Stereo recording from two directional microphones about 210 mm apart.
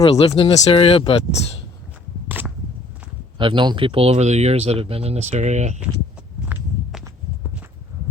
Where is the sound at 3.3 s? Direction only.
25° right (ahead or behind).